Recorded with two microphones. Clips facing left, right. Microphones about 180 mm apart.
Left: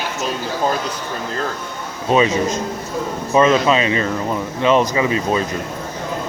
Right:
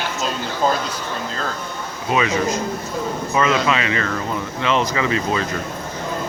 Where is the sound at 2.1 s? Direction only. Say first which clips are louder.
Left 4 dB; 25° left (ahead or behind).